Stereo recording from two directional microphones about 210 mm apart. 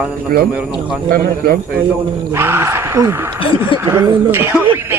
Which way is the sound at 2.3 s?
10° right (ahead or behind).